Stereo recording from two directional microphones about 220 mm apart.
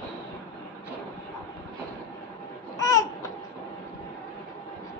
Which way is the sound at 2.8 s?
15° left (ahead or behind).